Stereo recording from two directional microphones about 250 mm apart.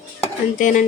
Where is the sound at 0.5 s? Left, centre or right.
Left.